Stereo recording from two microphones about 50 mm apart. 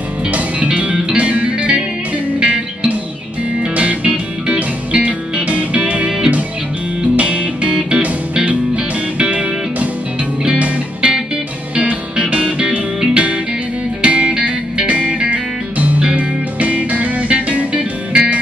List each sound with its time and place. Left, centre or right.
0.3 s music: right
7.2 s music: right
16.0 s music: centre